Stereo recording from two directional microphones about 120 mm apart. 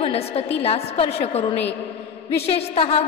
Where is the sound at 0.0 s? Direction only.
55° left (ahead or behind).